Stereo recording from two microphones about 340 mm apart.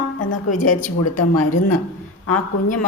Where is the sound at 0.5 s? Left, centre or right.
Left.